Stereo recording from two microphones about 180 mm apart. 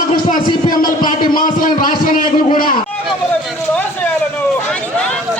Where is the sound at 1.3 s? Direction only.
50° left (ahead or behind).